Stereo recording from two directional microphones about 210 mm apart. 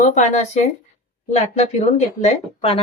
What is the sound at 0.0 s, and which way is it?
Speech, 35° left (ahead or behind).